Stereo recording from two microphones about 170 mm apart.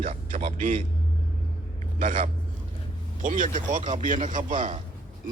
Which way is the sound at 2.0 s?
50° right (ahead or behind).